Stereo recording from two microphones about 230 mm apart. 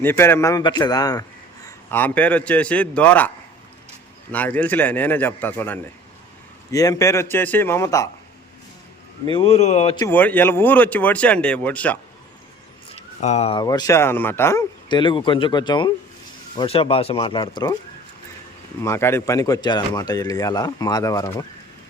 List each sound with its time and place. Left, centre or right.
0.0 s a man's voice: centre
9.2 s speech: left
10.1 s speech: centre
13.0 s speech: left
18.8 s speech: centre